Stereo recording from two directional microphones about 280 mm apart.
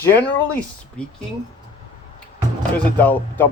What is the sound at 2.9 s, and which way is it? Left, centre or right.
Speech, centre.